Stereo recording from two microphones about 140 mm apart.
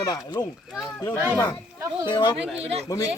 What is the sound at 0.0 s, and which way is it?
Speech, 30° left (ahead or behind).